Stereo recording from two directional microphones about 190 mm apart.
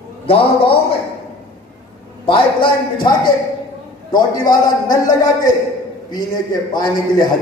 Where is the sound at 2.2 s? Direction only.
25° left (ahead or behind).